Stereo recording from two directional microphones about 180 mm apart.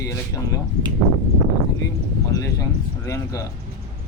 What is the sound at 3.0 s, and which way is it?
Speech, 15° left (ahead or behind).